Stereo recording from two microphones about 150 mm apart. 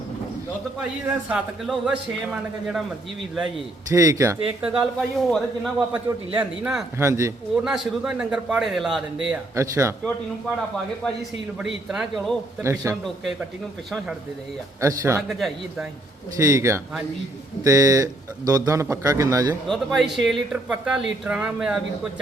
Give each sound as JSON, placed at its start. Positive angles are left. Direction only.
{"t": 1.0, "sound": "speech", "side_deg": -5}
{"t": 3.9, "sound": "a man's voice", "side_deg": -20}
{"t": 4.7, "sound": "speech", "side_deg": -5}
{"t": 7.0, "sound": "a man's voice", "side_deg": -20}
{"t": 7.5, "sound": "speech", "side_deg": -5}
{"t": 9.3, "sound": "a man's voice", "side_deg": -20}
{"t": 11.0, "sound": "speech", "side_deg": 0}
{"t": 12.6, "sound": "a man's voice", "side_deg": -20}
{"t": 14.8, "sound": "a man's voice", "side_deg": -20}
{"t": 15.3, "sound": "speech", "side_deg": 0}
{"t": 16.4, "sound": "a man's voice", "side_deg": -20}
{"t": 19.6, "sound": "speech", "side_deg": 0}